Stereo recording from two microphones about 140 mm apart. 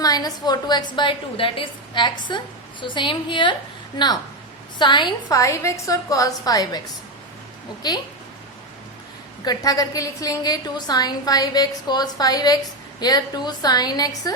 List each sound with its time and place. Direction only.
0.0 s a woman's voice: 25° left (ahead or behind)
9.4 s a woman's voice: 25° left (ahead or behind)